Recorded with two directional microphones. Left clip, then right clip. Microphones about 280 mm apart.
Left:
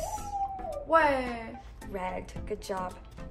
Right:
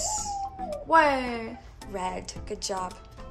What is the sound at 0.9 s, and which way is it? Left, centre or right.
Speech, right.